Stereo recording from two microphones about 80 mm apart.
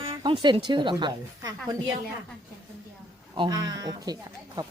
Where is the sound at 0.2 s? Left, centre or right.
Right.